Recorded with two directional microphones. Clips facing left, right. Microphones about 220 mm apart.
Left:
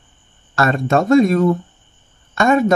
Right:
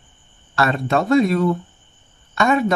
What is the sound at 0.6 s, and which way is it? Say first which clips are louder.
Speech: left 3 dB; 45° left (ahead or behind).